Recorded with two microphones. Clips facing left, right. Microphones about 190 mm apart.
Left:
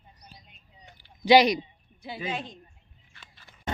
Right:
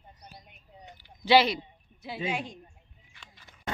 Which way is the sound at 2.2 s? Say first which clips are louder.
Right 1 dB; 10° right (ahead or behind).